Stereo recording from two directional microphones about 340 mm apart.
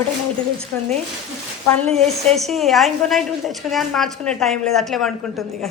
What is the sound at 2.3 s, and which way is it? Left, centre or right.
A woman's voice, centre.